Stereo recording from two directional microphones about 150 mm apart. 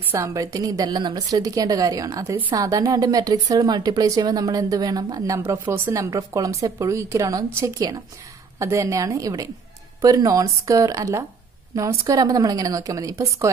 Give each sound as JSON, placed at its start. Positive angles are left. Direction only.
{"t": 0.1, "sound": "a woman's voice", "side_deg": -20}